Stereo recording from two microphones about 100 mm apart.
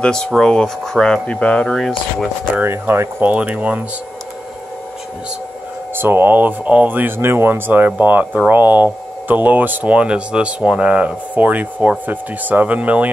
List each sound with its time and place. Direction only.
0.0 s speech: 5° left (ahead or behind)
2.5 s speech: 25° right (ahead or behind)
5.9 s speech: 20° right (ahead or behind)